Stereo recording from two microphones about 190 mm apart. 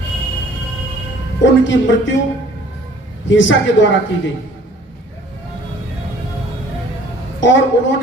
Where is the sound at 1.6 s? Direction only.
75° left (ahead or behind).